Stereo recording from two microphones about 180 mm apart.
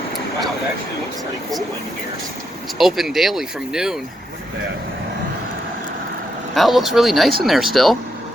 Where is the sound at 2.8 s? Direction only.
Centre (ahead or behind).